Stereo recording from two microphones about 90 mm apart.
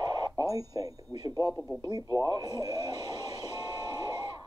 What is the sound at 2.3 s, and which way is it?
Radio, 45° right (ahead or behind).